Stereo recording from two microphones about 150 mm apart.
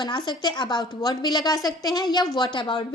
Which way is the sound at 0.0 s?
30° left (ahead or behind).